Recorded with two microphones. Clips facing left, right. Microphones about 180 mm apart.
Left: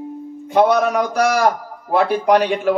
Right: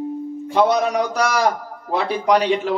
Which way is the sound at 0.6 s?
55° left (ahead or behind).